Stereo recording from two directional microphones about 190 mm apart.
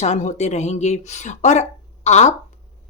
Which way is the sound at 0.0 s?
40° left (ahead or behind).